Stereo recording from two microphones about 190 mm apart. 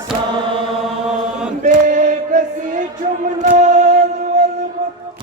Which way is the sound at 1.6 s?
40° right (ahead or behind).